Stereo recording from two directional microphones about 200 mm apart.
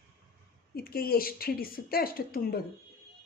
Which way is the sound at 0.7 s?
50° left (ahead or behind).